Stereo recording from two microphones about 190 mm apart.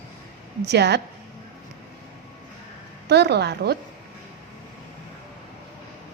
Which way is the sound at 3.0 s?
60° right (ahead or behind).